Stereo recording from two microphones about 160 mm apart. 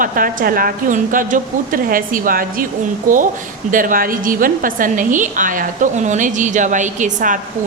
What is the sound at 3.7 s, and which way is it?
A woman's voice, 55° right (ahead or behind).